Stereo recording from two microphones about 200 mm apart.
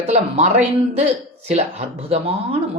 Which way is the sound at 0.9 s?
30° right (ahead or behind).